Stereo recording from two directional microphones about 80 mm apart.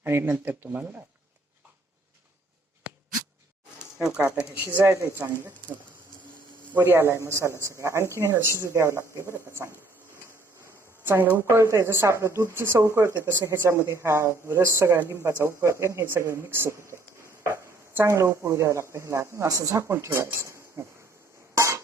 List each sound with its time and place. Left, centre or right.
0.0 s speech: right
3.9 s speech: centre
4.8 s speech: right
6.7 s speech: right
11.0 s speech: right
21.5 s a sound: right